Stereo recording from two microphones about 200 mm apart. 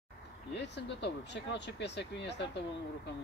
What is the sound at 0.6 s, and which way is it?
Speech, 60° left (ahead or behind).